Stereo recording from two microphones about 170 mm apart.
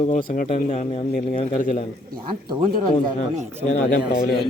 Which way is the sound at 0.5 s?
45° left (ahead or behind).